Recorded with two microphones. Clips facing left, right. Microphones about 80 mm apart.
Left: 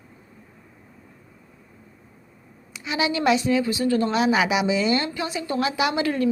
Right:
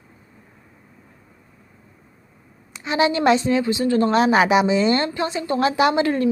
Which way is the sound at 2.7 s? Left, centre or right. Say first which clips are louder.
Right 5 dB; right.